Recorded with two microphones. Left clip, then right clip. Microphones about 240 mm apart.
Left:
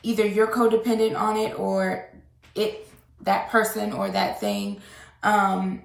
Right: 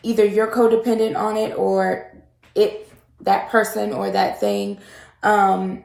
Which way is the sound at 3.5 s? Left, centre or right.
Centre.